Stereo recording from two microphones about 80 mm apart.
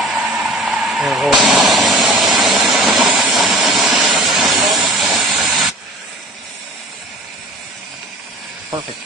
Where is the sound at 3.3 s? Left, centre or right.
Centre.